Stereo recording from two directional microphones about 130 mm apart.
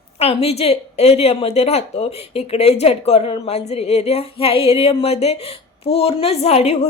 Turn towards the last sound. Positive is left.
turn(degrees=55)  # may be behind; listen again after turning